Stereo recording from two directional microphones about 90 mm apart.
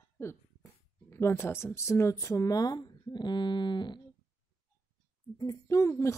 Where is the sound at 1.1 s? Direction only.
30° left (ahead or behind); by 4.0 s 55° left (ahead or behind).